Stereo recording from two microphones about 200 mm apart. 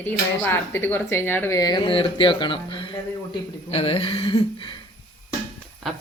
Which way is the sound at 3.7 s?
30° left (ahead or behind).